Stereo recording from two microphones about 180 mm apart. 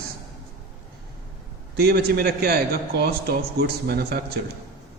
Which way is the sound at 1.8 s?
65° right (ahead or behind).